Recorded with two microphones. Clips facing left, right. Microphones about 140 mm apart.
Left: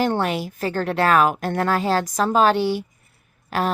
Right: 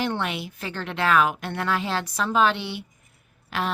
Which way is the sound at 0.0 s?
40° left (ahead or behind).